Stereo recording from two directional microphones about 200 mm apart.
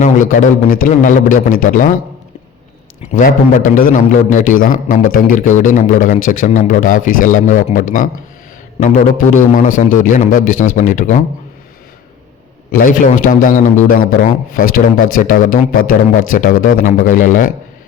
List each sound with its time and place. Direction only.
0.0 s a man's voice: 40° left (ahead or behind)
3.1 s a man's voice: 40° left (ahead or behind)
12.7 s a man's voice: 45° left (ahead or behind)